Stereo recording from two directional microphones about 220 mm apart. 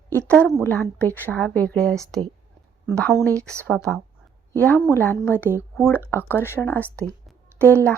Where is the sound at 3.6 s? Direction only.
5° left (ahead or behind).